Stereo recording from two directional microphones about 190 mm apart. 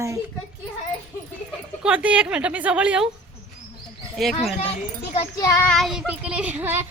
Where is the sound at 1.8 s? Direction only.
5° right (ahead or behind).